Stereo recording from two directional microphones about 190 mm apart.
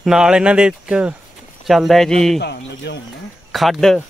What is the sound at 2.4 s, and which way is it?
Speech, 65° left (ahead or behind).